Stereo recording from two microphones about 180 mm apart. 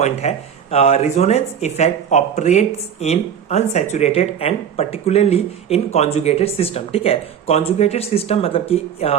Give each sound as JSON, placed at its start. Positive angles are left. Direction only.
{"t": 0.0, "sound": "speech", "side_deg": 35}